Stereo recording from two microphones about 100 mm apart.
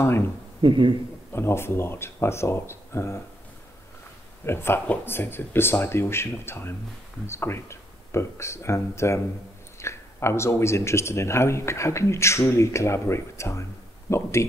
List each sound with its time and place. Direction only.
0.6 s speech: 55° right (ahead or behind)
1.3 s speech: 25° left (ahead or behind)
4.5 s speech: 25° left (ahead or behind)